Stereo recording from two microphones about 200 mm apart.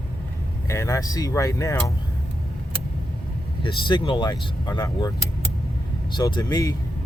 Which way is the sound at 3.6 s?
25° left (ahead or behind).